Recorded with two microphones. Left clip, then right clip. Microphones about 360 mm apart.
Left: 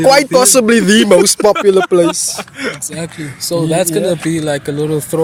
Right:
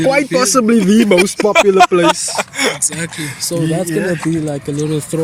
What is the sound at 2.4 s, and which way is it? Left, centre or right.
Speech, centre.